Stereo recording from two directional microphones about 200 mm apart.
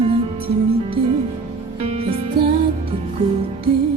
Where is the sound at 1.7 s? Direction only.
30° right (ahead or behind).